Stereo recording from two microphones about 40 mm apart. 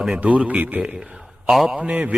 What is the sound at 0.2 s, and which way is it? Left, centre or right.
Speech, right.